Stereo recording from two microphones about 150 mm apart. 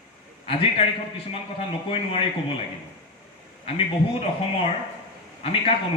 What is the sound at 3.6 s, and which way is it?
Speech, 40° left (ahead or behind).